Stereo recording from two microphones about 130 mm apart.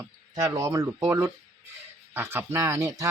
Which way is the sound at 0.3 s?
25° right (ahead or behind).